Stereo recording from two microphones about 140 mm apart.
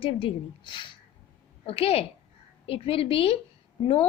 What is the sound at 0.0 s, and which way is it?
Speech, 40° left (ahead or behind).